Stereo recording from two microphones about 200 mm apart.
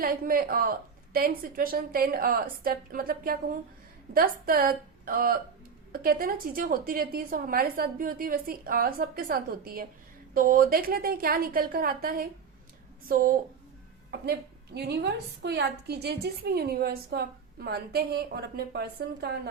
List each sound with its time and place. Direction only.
0.0 s a woman's voice: 45° right (ahead or behind)
14.1 s a woman's voice: 55° right (ahead or behind)